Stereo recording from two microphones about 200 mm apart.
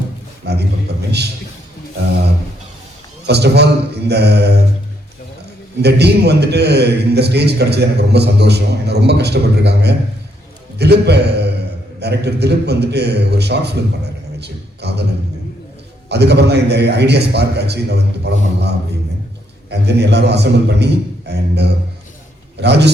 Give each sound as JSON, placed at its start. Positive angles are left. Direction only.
{"t": 0.4, "sound": "a man's voice", "side_deg": -55}
{"t": 3.2, "sound": "a man's voice", "side_deg": -55}
{"t": 5.8, "sound": "a man's voice", "side_deg": -55}
{"t": 16.0, "sound": "a man's voice", "side_deg": -55}
{"t": 19.7, "sound": "a man's voice", "side_deg": -55}